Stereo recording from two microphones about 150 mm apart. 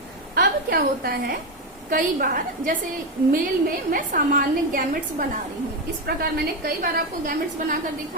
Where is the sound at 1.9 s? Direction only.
65° right (ahead or behind).